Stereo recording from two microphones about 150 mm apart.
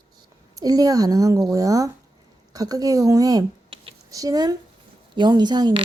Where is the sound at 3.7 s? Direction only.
35° right (ahead or behind).